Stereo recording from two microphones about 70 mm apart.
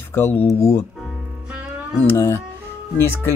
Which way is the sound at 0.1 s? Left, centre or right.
Left.